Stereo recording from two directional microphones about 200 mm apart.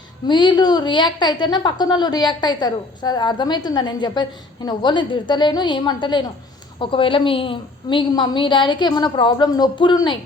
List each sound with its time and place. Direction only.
0.3 s a woman's voice: 20° left (ahead or behind)